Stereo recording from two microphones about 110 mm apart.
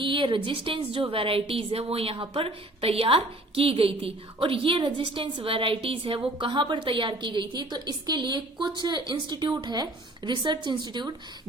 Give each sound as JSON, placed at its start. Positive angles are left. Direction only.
{"t": 0.0, "sound": "a woman's voice", "side_deg": -50}